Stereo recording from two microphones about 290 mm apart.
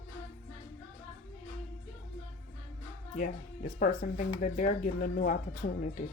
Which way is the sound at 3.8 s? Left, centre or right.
Left.